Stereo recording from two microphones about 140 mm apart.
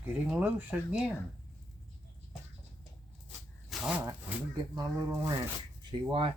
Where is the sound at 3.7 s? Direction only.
5° right (ahead or behind).